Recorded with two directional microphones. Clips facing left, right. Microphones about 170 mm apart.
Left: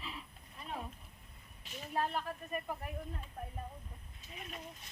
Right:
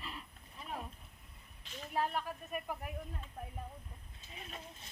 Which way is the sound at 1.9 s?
10° right (ahead or behind).